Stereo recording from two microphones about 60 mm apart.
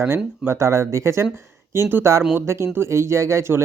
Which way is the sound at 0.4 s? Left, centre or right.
Right.